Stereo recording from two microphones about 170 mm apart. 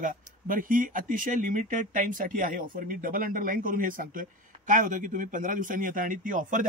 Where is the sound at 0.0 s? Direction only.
55° right (ahead or behind).